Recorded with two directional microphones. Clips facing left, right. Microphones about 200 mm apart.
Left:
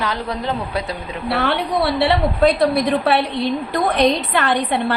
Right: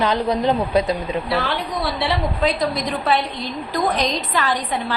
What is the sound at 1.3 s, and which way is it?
A woman's voice, 60° left (ahead or behind).